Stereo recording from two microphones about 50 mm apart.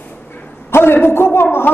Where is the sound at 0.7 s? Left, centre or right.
Left.